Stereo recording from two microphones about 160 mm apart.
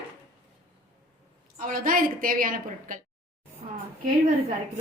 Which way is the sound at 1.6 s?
60° right (ahead or behind).